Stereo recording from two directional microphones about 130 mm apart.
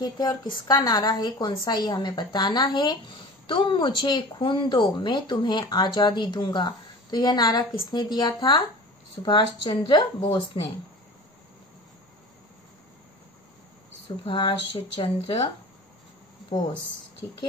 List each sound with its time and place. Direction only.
0.0 s speech: 30° left (ahead or behind)
14.0 s speech: 40° left (ahead or behind)